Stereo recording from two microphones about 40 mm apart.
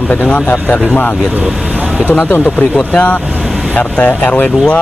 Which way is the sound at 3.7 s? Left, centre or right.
Left.